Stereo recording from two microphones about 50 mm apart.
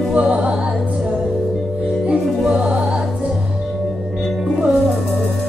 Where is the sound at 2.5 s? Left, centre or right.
Right.